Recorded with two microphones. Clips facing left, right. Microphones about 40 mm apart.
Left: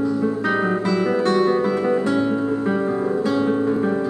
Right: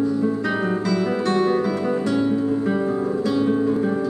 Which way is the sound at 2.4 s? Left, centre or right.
Left.